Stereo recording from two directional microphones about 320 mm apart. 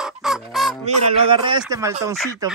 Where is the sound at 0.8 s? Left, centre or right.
Centre.